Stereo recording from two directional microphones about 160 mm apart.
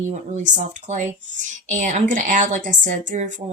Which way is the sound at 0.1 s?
50° right (ahead or behind).